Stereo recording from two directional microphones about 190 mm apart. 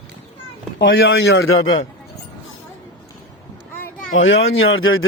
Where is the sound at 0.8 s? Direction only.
90° left.